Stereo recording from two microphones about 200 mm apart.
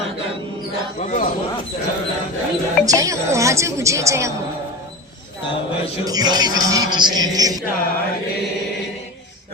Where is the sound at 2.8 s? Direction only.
15° right (ahead or behind).